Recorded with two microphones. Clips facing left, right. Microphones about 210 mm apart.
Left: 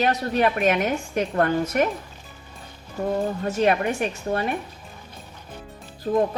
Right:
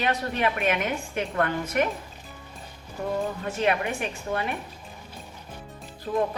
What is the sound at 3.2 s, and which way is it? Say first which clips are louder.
A woman's voice: left 5 dB; 40° left (ahead or behind).